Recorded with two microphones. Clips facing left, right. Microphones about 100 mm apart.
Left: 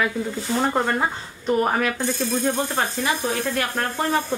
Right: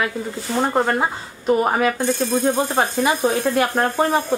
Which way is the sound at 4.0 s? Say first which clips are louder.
Right 2 dB; 20° right (ahead or behind).